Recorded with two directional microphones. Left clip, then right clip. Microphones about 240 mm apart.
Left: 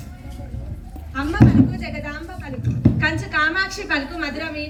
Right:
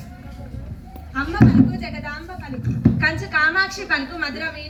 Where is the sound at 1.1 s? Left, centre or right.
Left.